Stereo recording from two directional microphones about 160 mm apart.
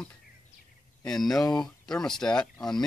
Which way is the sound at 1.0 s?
Centre (ahead or behind).